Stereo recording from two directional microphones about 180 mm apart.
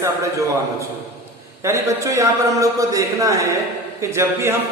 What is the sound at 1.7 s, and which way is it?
A man's voice, 15° right (ahead or behind).